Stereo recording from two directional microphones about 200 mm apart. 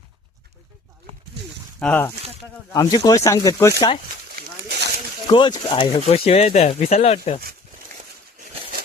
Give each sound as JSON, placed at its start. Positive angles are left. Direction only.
{"t": 1.8, "sound": "speech", "side_deg": 10}
{"t": 5.3, "sound": "speech", "side_deg": 25}